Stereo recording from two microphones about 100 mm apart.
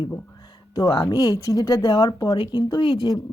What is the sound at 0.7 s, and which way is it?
Speech, 45° left (ahead or behind).